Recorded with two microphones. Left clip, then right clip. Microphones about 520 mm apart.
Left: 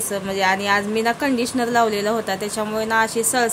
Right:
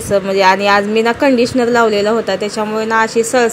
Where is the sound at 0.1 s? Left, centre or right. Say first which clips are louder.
Right 10 dB; left.